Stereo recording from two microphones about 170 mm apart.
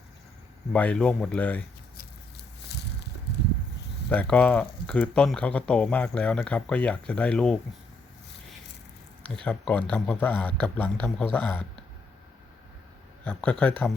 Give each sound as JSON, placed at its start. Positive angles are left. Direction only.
{"t": 0.7, "sound": "speech", "side_deg": 10}
{"t": 2.6, "sound": "a sound", "side_deg": 80}
{"t": 4.1, "sound": "speech", "side_deg": 10}
{"t": 9.2, "sound": "speech", "side_deg": 5}
{"t": 13.2, "sound": "speech", "side_deg": 5}